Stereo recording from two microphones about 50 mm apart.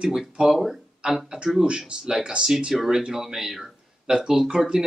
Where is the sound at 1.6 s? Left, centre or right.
Centre.